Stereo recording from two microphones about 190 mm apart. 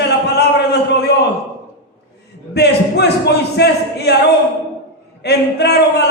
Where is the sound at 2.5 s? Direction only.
60° left (ahead or behind).